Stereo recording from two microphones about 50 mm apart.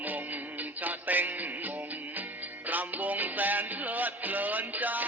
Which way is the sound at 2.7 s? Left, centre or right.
Right.